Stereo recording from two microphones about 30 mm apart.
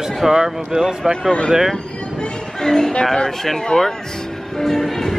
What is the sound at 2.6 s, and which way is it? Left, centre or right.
Speech, centre.